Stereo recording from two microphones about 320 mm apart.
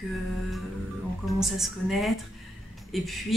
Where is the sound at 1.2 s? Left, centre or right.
Centre.